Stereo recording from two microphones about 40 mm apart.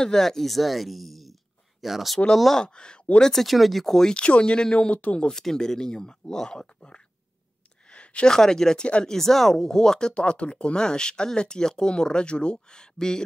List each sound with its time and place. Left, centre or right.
0.0 s speech: centre
2.6 s speech: left
3.2 s speech: centre
3.4 s speech: centre
4.1 s speech: left
5.3 s speech: centre
7.9 s a sound: left
8.3 s speech: centre
8.8 s speech: left
9.1 s speech: centre